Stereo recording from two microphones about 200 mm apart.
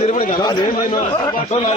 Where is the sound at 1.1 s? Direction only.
25° left (ahead or behind).